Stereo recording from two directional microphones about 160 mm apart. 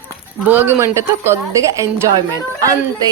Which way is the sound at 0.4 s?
10° right (ahead or behind).